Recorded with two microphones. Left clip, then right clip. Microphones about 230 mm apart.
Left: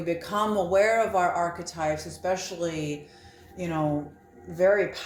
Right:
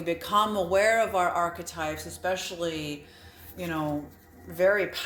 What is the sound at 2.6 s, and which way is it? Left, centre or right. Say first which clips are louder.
Speech: left 1 dB; right.